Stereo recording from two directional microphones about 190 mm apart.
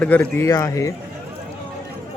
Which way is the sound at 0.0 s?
10° left (ahead or behind).